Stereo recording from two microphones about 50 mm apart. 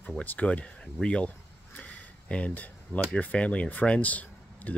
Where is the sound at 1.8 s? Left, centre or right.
Left.